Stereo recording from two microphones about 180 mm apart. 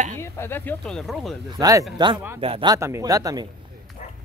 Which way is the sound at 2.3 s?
30° right (ahead or behind).